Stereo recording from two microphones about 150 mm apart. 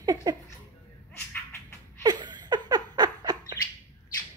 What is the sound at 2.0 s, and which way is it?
Laughter, 30° right (ahead or behind).